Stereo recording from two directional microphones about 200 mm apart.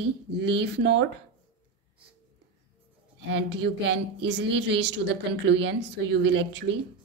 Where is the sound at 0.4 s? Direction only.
60° right (ahead or behind).